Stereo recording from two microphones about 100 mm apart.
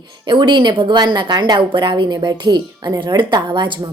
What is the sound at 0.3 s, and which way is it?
A woman's voice, 55° right (ahead or behind).